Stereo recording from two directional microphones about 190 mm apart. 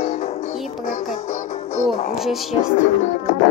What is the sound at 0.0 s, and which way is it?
Music, 35° left (ahead or behind).